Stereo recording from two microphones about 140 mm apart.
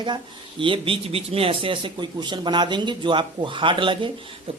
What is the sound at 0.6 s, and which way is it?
A man's voice, 40° right (ahead or behind).